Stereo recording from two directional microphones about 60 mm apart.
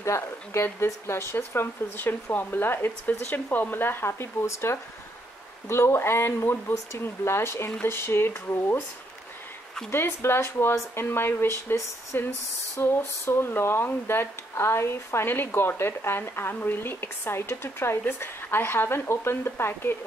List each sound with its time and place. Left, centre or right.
0.0 s speech: left
9.8 s speech: left
12.8 s speech: left